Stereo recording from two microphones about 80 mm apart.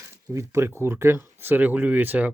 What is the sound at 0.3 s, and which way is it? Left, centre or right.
Speech, right.